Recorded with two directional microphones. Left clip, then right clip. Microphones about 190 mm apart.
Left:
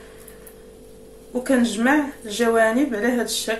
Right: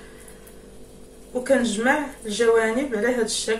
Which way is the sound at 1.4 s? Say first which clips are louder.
Even; 45° left (ahead or behind).